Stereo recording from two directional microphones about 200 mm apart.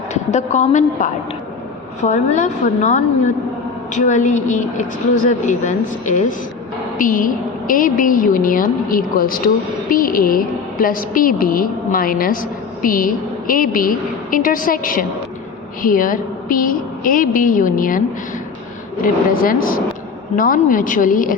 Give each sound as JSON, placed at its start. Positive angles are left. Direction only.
{"t": 0.1, "sound": "a woman's voice", "side_deg": 35}
{"t": 19.0, "sound": "a woman's voice", "side_deg": 45}